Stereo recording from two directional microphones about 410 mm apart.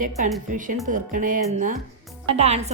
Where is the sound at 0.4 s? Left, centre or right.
Centre.